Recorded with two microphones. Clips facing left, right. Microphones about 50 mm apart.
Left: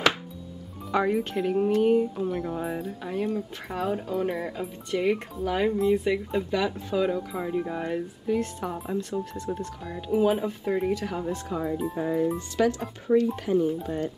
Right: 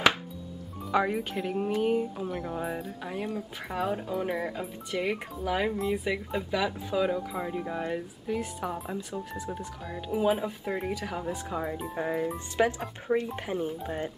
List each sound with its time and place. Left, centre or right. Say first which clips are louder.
0.9 s speech: left 3 dB; centre
11.9 s speech: left 3 dB; right